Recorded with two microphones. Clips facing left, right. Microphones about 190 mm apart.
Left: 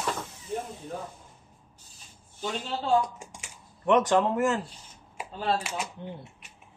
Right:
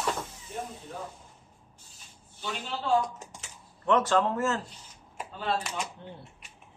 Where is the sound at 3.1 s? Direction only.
15° left (ahead or behind).